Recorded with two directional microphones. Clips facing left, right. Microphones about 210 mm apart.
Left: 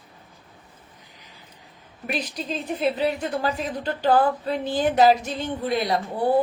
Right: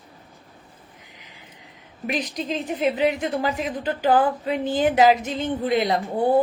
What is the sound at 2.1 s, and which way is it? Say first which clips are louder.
A woman's voice: right 3 dB; 15° right (ahead or behind).